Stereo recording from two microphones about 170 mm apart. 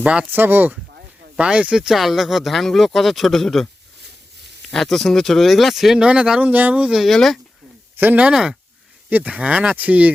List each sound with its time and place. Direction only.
0.0 s speech: 5° right (ahead or behind)
4.7 s speech: centre (ahead or behind)
7.9 s speech: 10° right (ahead or behind)